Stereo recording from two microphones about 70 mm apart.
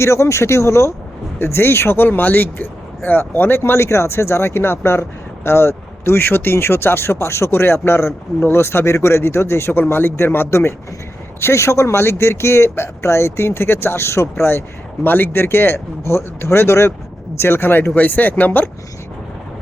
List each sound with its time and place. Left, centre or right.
0.0 s speech: left
15.0 s speech: left